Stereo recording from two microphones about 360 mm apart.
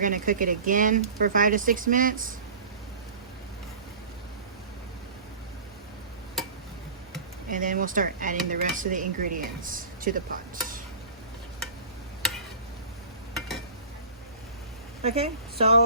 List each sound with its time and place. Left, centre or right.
0.0 s speech: right
7.5 s speech: right
15.0 s speech: centre